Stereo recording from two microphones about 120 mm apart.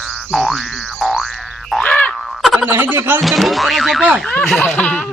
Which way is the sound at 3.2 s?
Centre (ahead or behind).